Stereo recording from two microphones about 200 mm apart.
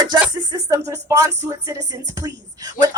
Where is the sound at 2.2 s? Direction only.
20° right (ahead or behind).